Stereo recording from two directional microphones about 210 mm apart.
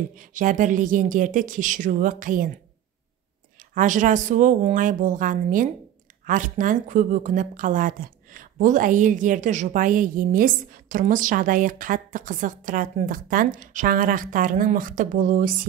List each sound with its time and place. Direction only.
0.1 s a woman's voice: 40° right (ahead or behind)
3.5 s a woman's voice: 40° right (ahead or behind)